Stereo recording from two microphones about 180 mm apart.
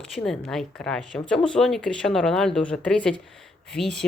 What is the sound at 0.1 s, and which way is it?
Speech, 5° left (ahead or behind).